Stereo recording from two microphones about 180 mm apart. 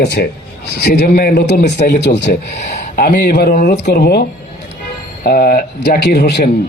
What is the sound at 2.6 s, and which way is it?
A man's voice, 40° left (ahead or behind).